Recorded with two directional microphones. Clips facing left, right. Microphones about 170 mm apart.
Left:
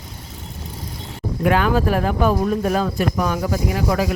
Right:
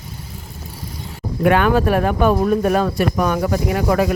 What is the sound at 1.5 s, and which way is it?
Speech, 60° right (ahead or behind).